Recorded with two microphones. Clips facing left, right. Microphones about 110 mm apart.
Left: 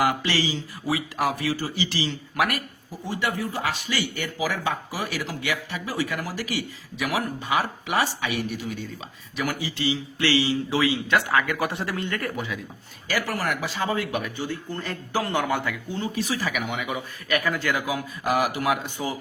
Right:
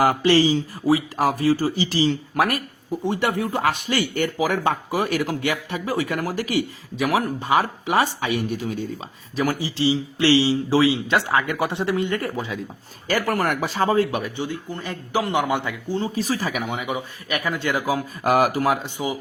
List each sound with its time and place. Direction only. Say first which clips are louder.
0.0 s speech: right 7 dB; 40° right (ahead or behind)
3.1 s speech: right 4 dB; 55° right (ahead or behind)
9.3 s speech: right 5 dB; 35° right (ahead or behind)
13.1 s speech: right 5 dB; 45° right (ahead or behind)
18.2 s speech: right 5 dB; 50° right (ahead or behind)
18.8 s speech: right 3 dB; 20° right (ahead or behind)